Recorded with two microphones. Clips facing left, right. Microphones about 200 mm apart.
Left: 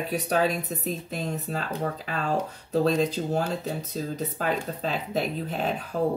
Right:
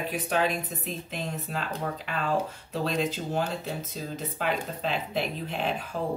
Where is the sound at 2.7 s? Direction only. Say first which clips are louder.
Left 6 dB; 40° left (ahead or behind).